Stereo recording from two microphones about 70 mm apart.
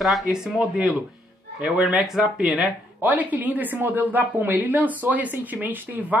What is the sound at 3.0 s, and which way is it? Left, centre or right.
Speech, right.